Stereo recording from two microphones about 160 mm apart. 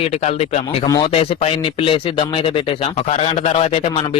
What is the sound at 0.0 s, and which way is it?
A man's voice, 40° left (ahead or behind).